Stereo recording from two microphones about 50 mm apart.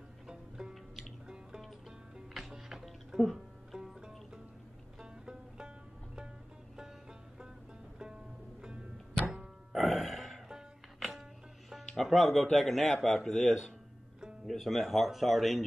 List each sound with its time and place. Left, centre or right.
0.3 s music: centre
1.6 s music: centre
8.0 s music: centre
11.7 s speech: centre